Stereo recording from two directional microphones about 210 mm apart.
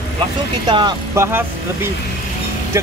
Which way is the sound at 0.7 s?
20° right (ahead or behind).